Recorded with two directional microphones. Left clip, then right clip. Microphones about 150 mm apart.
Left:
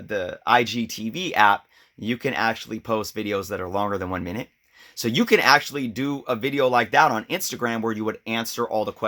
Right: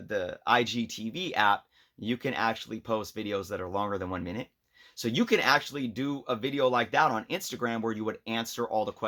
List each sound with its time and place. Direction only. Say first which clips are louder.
0.1 s speech: left 6 dB; 25° left (ahead or behind)